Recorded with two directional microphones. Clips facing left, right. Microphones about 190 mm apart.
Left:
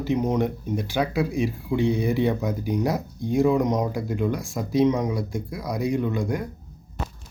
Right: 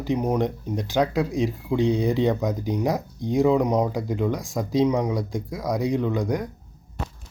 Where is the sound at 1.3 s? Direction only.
15° right (ahead or behind).